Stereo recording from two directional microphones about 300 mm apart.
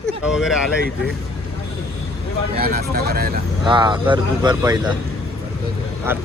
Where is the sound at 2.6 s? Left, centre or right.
Right.